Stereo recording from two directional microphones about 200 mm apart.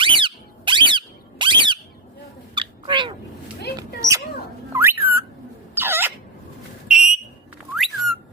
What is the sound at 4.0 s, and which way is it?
Mouse, 15° right (ahead or behind).